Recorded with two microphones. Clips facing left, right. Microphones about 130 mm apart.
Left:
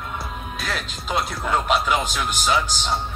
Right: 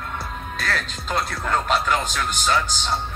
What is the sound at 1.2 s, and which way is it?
A man's voice, 5° left (ahead or behind).